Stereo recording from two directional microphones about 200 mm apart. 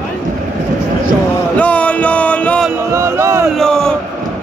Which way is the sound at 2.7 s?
15° right (ahead or behind).